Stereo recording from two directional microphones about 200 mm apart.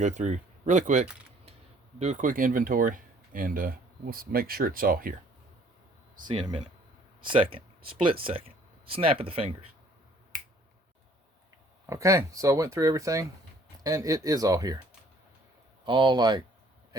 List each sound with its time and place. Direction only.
0.0 s speech: 35° right (ahead or behind)
6.2 s speech: 25° right (ahead or behind)
11.9 s speech: 15° right (ahead or behind)
15.8 s speech: 25° right (ahead or behind)